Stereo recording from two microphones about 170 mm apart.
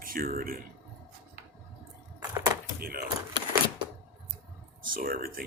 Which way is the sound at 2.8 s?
60° right (ahead or behind).